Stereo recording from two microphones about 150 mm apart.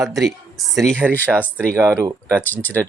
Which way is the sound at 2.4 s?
10° left (ahead or behind).